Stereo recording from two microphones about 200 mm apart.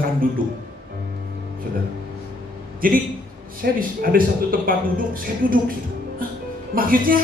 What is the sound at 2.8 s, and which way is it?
A man's voice, 45° right (ahead or behind).